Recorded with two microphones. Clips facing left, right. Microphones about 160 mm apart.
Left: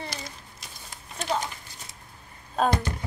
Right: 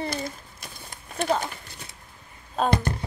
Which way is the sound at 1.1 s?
55° right (ahead or behind).